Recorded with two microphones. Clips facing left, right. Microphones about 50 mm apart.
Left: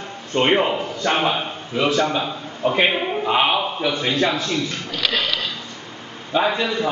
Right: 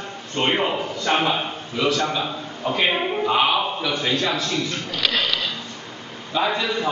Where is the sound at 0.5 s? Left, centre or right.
Centre.